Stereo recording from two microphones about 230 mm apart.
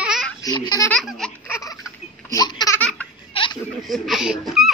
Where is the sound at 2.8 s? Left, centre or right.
Centre.